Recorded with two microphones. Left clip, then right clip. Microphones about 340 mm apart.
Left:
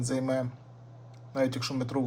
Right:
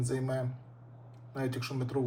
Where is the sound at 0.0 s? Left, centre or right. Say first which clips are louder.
Left 5 dB; centre.